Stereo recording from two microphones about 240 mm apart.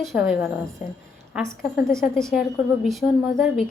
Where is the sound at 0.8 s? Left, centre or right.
Left.